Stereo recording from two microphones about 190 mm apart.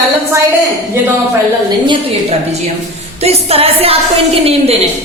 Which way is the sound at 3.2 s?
30° right (ahead or behind).